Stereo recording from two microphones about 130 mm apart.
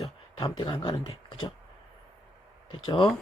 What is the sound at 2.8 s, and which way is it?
Speech, 40° left (ahead or behind).